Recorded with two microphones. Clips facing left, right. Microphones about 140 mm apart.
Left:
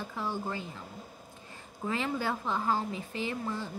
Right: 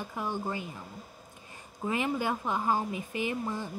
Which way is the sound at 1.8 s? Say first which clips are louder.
Right 2 dB; 15° right (ahead or behind).